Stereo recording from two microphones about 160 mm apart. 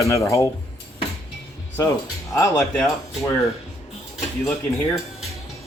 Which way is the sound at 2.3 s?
15° left (ahead or behind).